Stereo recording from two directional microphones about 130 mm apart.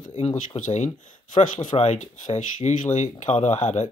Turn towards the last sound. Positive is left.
turn(degrees=60)  # may be behind; listen again after turning